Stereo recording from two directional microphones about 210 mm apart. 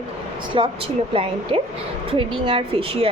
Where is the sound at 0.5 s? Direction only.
25° right (ahead or behind).